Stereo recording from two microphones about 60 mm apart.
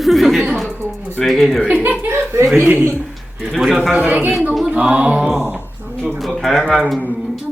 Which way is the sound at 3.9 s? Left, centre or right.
Right.